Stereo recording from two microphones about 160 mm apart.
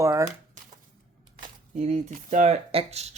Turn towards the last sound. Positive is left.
turn(degrees=-40)  # may be behind; listen again after turning